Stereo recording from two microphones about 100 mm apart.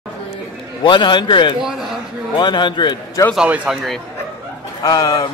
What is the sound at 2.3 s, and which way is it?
Speech, 50° left (ahead or behind).